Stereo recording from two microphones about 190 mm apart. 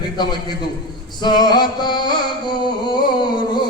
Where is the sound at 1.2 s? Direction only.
20° left (ahead or behind).